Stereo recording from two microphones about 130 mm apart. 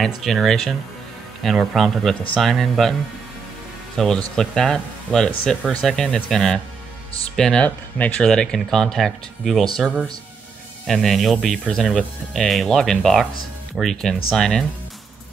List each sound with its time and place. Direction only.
0.0 s speech: centre (ahead or behind)
10.9 s speech: centre (ahead or behind)